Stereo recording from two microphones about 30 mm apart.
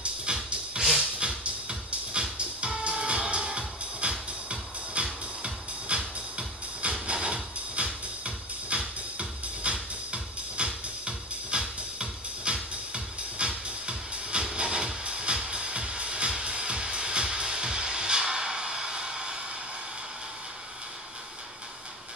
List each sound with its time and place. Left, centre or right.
0.3 s music: right
0.9 s a sound: right
1.4 s music: right